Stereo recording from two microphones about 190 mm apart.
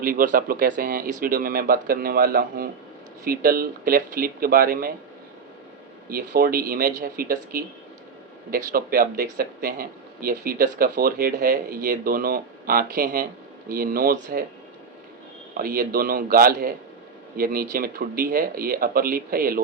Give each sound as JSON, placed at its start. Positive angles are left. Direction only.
{"t": 0.0, "sound": "speech", "side_deg": -45}
{"t": 6.1, "sound": "speech", "side_deg": -50}
{"t": 14.1, "sound": "speech", "side_deg": -45}
{"t": 15.5, "sound": "speech", "side_deg": -50}